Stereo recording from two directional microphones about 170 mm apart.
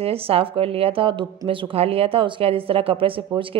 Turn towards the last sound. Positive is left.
turn(degrees=-30)  # may be behind; listen again after turning